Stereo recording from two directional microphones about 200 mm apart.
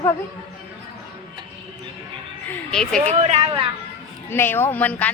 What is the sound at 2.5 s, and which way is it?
Speech, 5° left (ahead or behind).